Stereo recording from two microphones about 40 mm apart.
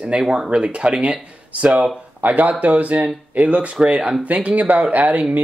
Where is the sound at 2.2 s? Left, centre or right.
Right.